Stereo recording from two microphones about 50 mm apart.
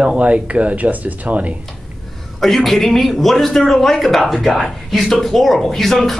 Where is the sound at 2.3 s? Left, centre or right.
Centre.